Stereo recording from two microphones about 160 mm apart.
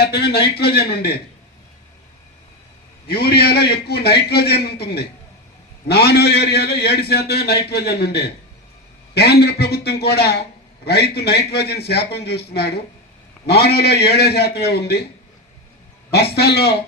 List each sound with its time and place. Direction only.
0.0 s a man's voice: 90° left
3.1 s a man's voice: 80° left
16.1 s a man's voice: 90° left